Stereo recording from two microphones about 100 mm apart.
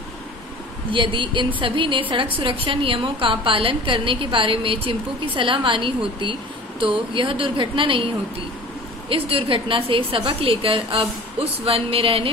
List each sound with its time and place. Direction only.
0.9 s a woman's voice: 55° right (ahead or behind)
9.1 s a woman's voice: 60° right (ahead or behind)